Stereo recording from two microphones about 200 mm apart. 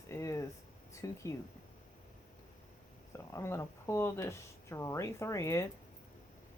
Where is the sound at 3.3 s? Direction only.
15° left (ahead or behind).